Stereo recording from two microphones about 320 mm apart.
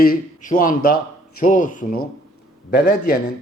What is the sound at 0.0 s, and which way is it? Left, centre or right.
A man's voice, left.